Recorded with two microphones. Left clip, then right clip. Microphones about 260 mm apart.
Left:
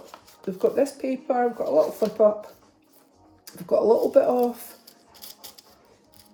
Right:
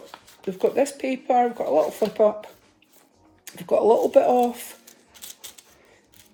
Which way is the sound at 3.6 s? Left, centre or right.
Right.